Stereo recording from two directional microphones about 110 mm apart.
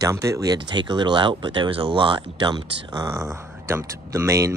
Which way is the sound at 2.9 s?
30° right (ahead or behind).